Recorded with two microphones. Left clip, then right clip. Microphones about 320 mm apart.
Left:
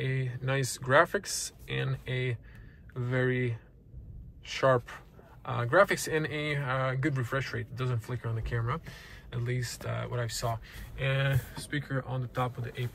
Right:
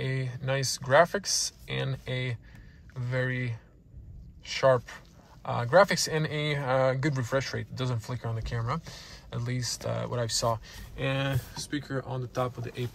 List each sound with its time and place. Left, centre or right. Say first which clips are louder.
0.0 s speech: right 1 dB; centre